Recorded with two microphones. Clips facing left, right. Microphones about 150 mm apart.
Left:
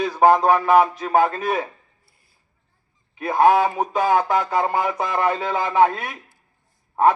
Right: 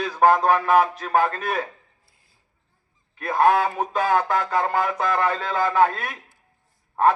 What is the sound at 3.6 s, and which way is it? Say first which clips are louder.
Speech: left 3 dB; 15° left (ahead or behind).